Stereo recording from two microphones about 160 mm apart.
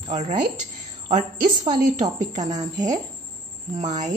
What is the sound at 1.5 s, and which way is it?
A woman's voice, 30° right (ahead or behind).